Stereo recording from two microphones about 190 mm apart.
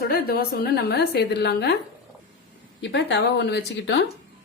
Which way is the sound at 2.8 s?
65° left (ahead or behind).